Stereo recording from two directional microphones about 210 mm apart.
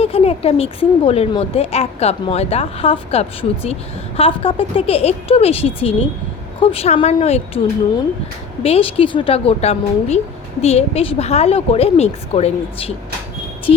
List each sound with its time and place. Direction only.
0.0 s a woman's voice: 25° left (ahead or behind)
8.6 s a woman's voice: 25° left (ahead or behind)